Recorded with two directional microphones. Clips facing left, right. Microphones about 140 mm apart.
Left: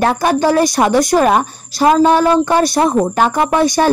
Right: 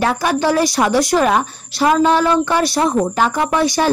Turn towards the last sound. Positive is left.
turn(degrees=45)  # may be behind; listen again after turning